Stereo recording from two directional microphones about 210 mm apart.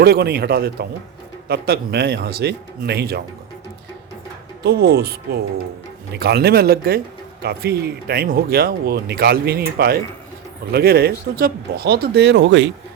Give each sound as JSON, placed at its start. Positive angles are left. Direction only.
{"t": 0.0, "sound": "speech", "side_deg": -50}
{"t": 4.6, "sound": "speech", "side_deg": -50}